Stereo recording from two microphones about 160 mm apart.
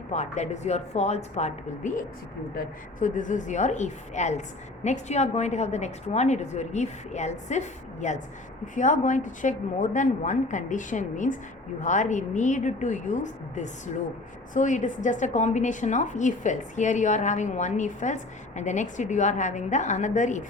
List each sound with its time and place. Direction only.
0.1 s a woman's voice: 45° left (ahead or behind)